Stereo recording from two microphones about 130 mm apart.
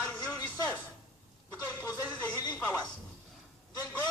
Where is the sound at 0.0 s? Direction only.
15° left (ahead or behind).